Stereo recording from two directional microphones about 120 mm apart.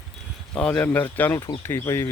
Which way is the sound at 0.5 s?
5° left (ahead or behind).